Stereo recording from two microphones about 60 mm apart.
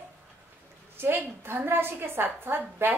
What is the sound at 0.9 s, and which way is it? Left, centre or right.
A woman's voice, right.